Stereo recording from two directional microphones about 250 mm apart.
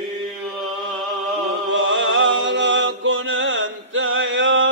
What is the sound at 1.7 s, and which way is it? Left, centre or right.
Chant, right.